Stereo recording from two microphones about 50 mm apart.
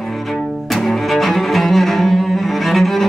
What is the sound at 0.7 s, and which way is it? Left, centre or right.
Cello, centre.